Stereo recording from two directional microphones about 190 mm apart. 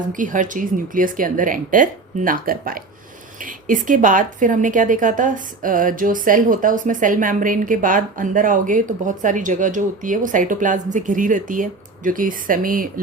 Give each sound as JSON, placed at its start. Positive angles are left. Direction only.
{"t": 0.1, "sound": "a woman's voice", "side_deg": -45}